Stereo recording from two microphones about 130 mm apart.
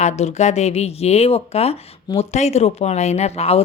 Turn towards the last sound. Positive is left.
turn(degrees=50)  # may be behind; listen again after turning